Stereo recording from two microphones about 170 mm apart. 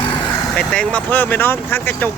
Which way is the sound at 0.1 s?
5° left (ahead or behind).